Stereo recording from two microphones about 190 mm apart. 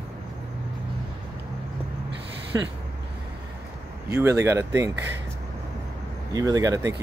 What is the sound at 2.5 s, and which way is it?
Speech, 15° right (ahead or behind).